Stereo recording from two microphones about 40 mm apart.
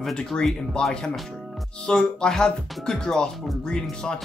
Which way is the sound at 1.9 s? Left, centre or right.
Centre.